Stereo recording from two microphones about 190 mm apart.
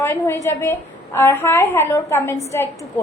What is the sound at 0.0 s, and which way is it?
A woman's voice, 10° left (ahead or behind).